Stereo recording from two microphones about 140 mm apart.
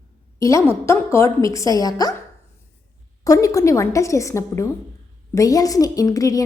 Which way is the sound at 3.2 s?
25° left (ahead or behind).